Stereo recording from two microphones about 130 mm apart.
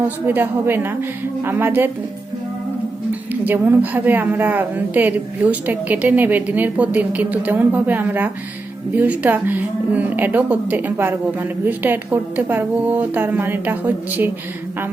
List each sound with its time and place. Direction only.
0.3 s a woman's voice: 15° right (ahead or behind)
3.1 s a woman's voice: 15° right (ahead or behind)